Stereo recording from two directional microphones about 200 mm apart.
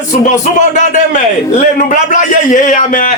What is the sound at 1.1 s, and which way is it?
A man's voice, 40° left (ahead or behind).